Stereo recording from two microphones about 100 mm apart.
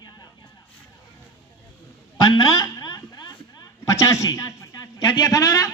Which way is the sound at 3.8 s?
35° left (ahead or behind).